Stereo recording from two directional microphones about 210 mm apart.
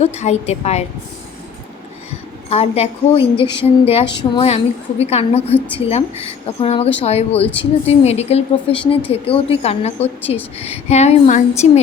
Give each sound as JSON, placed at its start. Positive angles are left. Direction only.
{"t": 0.0, "sound": "speech", "side_deg": 30}
{"t": 2.5, "sound": "speech", "side_deg": 30}
{"t": 5.5, "sound": "a woman's voice", "side_deg": 5}
{"t": 5.8, "sound": "speech", "side_deg": 30}